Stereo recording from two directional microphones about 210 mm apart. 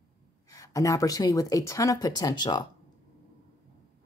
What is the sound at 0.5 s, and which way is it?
Speech, 15° left (ahead or behind).